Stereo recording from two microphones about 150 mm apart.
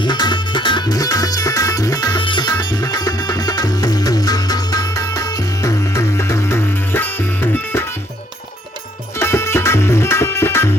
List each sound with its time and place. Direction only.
0.0 s music: 30° left (ahead or behind)
9.1 s music: 15° left (ahead or behind)